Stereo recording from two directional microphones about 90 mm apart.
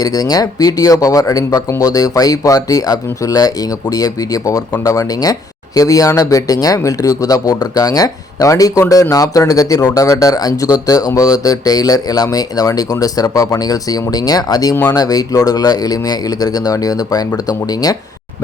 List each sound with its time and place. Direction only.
0.0 s speech: 45° left (ahead or behind)